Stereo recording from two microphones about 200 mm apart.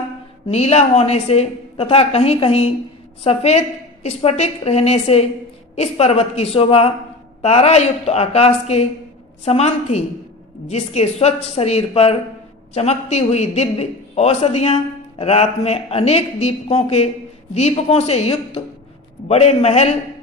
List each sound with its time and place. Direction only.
0.5 s a man's voice: 30° left (ahead or behind)